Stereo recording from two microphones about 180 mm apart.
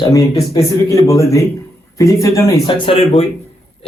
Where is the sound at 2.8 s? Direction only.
30° left (ahead or behind).